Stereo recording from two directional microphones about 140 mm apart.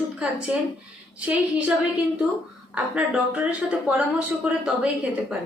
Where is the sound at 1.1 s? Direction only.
10° right (ahead or behind).